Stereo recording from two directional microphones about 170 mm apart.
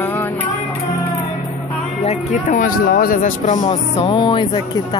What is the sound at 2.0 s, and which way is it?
Speech, 45° left (ahead or behind).